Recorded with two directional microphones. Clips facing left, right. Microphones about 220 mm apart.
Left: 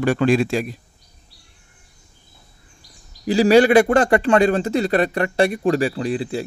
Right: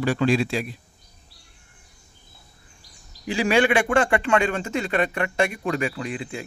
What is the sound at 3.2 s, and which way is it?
Speech, 35° left (ahead or behind).